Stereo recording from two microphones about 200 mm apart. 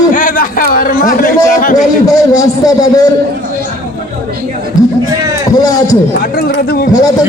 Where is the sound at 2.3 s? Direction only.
15° left (ahead or behind).